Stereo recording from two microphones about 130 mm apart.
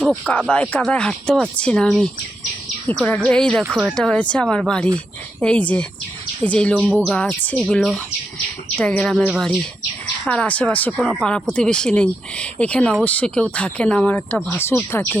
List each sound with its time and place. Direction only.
0.3 s speech: 10° left (ahead or behind)